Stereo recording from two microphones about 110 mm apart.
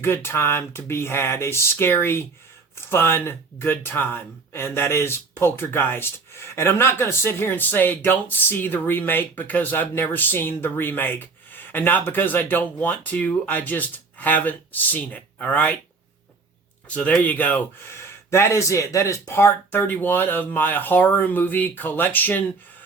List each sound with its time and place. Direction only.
0.0 s speech: 20° left (ahead or behind)
16.9 s speech: 15° left (ahead or behind)
17.9 s speech: 25° left (ahead or behind)